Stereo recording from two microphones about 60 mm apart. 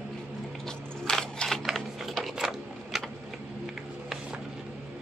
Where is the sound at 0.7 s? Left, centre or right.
Centre.